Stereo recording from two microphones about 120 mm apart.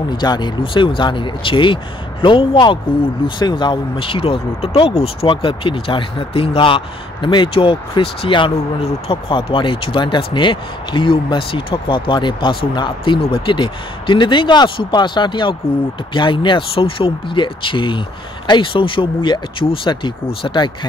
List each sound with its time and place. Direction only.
0.2 s speech: 40° left (ahead or behind)